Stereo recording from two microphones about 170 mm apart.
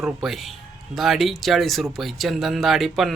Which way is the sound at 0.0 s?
Centre (ahead or behind).